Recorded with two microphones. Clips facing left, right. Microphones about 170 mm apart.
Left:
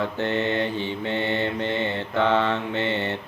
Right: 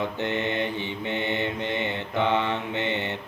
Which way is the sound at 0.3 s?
15° right (ahead or behind).